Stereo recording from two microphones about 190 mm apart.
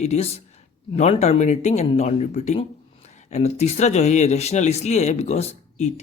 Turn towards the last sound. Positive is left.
turn(degrees=35)  # may be behind; listen again after turning